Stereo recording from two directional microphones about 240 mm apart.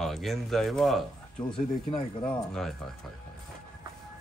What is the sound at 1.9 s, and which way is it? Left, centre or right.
Speech, left.